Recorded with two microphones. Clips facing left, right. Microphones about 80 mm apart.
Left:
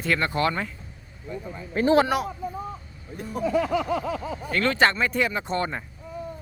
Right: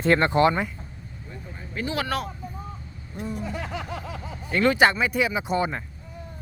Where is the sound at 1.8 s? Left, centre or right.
Left.